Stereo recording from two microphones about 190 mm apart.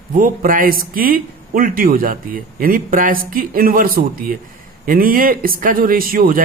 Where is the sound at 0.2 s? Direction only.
45° right (ahead or behind).